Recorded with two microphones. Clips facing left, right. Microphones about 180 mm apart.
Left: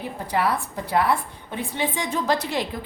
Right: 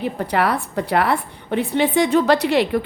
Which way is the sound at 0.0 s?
70° right (ahead or behind).